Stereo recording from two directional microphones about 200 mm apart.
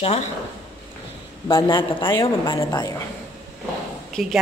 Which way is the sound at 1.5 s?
20° left (ahead or behind).